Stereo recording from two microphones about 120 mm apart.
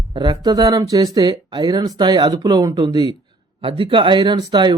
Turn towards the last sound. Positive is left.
turn(degrees=-40)  # may be behind; listen again after turning